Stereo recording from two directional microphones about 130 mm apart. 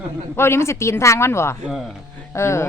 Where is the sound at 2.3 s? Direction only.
20° left (ahead or behind).